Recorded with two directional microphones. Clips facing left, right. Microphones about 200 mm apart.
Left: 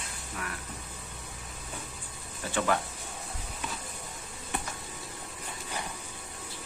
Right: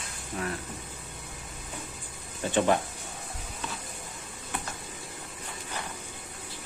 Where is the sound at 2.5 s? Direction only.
20° right (ahead or behind).